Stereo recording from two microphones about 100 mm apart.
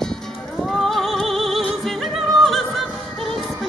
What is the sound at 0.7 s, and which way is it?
Music, centre (ahead or behind).